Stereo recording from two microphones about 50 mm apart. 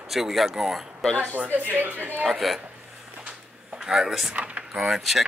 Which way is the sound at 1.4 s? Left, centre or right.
Right.